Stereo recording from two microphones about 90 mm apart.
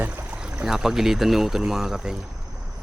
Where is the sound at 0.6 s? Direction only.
5° right (ahead or behind).